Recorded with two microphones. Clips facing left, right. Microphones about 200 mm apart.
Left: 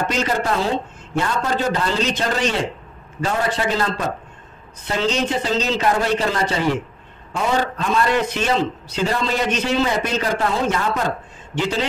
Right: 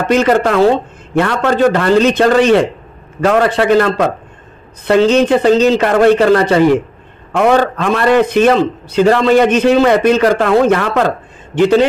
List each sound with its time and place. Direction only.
0.1 s a man's voice: 65° right (ahead or behind)
7.3 s a man's voice: 70° right (ahead or behind)
11.5 s a man's voice: 55° right (ahead or behind)